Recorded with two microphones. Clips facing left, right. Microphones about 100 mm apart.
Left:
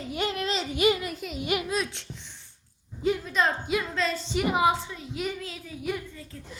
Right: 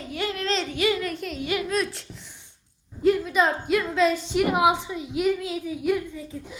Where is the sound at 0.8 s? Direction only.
20° left (ahead or behind).